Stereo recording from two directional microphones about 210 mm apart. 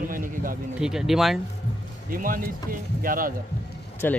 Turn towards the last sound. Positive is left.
turn(degrees=10)  # may be behind; listen again after turning